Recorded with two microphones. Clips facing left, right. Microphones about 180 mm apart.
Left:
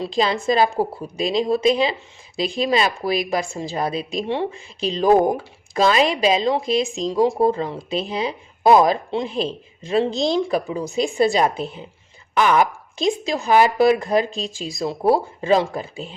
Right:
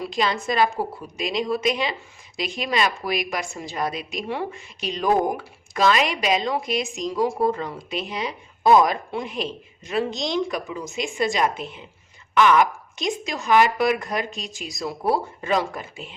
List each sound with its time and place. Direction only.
0.0 s a woman's voice: 30° left (ahead or behind)